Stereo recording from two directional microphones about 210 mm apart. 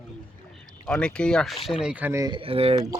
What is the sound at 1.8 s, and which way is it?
Speech, 5° right (ahead or behind).